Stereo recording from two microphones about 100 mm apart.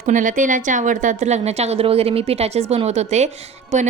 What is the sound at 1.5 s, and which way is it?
Speech, 90° right.